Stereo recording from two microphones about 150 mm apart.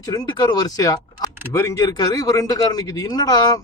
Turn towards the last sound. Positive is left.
turn(degrees=25)  # may be behind; listen again after turning